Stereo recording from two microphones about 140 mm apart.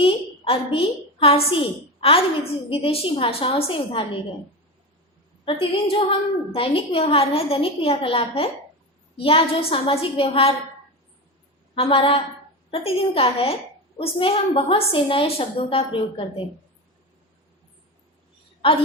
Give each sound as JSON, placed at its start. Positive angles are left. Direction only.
{"t": 0.0, "sound": "a woman's voice", "side_deg": 40}
{"t": 5.5, "sound": "a woman's voice", "side_deg": 40}
{"t": 11.7, "sound": "a woman's voice", "side_deg": 40}